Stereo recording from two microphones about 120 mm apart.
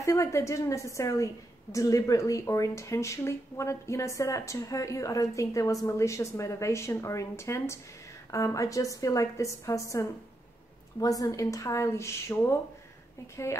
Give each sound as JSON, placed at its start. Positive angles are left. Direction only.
{"t": 0.0, "sound": "a woman's voice", "side_deg": 25}